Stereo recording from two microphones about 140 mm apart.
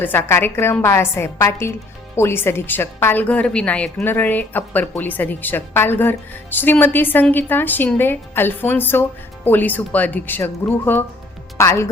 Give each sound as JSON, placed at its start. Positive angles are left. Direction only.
{"t": 0.0, "sound": "speech", "side_deg": 15}